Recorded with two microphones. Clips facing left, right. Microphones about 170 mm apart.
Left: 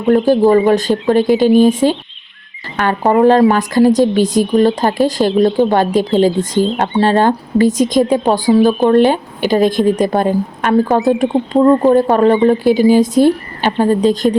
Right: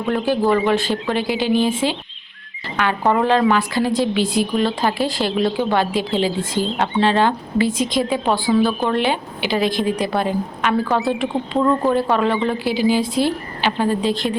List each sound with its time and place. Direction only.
0.1 s a woman's voice: 40° left (ahead or behind)